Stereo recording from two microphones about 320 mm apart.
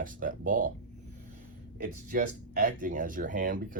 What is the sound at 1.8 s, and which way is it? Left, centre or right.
Speech, right.